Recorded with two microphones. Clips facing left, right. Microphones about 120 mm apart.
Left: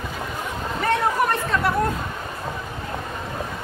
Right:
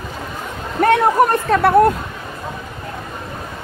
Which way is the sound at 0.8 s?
55° right (ahead or behind).